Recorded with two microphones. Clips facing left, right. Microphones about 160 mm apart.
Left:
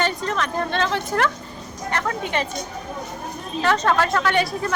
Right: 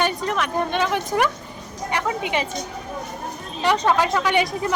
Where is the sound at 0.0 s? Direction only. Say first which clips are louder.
Right 1 dB; 10° right (ahead or behind).